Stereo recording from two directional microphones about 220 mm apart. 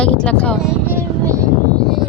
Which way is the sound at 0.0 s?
5° left (ahead or behind).